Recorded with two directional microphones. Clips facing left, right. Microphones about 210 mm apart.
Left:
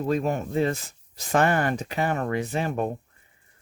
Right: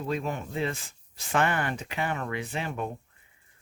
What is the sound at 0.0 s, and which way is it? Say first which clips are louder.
Speech: left 6 dB; 45° left (ahead or behind).